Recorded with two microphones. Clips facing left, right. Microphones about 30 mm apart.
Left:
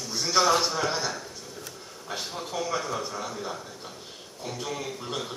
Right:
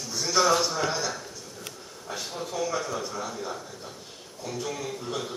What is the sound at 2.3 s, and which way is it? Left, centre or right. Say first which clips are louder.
Speech: right 1 dB; left.